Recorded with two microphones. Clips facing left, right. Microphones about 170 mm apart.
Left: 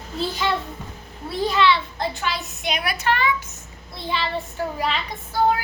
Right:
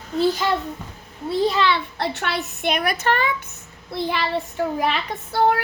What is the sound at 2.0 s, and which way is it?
A woman's voice, 65° right (ahead or behind).